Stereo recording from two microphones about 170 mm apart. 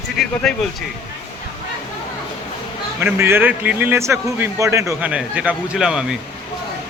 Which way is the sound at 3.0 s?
15° right (ahead or behind).